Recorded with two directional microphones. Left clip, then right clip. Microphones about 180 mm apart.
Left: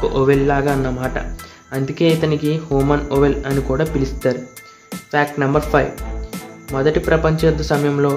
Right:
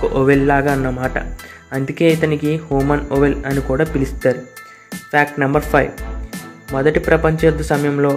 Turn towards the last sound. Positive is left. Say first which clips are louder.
# right 1 dB
turn(degrees=-15)  # may be behind; listen again after turning